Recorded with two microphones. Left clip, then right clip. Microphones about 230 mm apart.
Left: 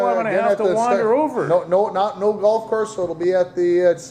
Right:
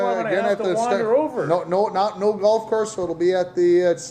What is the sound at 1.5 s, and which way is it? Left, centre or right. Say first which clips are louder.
A man's voice: left 2 dB; right.